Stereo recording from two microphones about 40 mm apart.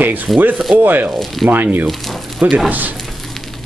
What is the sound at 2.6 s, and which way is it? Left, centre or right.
Speech, right.